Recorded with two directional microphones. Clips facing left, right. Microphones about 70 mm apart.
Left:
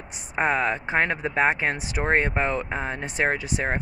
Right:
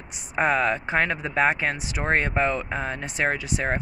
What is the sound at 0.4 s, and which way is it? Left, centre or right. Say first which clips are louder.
Speech: right 1 dB; left.